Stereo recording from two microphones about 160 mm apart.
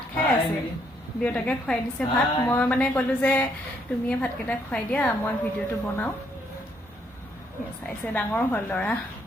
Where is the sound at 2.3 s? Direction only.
20° left (ahead or behind).